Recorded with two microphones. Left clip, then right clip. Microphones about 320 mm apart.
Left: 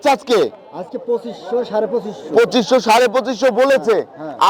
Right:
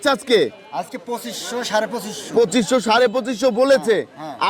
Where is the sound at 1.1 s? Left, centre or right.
Right.